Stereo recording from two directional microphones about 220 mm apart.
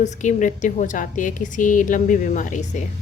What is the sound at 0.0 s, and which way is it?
A woman's voice, 35° left (ahead or behind).